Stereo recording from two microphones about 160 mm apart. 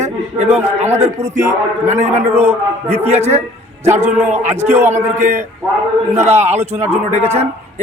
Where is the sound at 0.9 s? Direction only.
45° right (ahead or behind).